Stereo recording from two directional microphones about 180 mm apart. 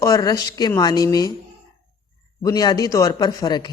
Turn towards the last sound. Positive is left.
turn(degrees=20)  # may be behind; listen again after turning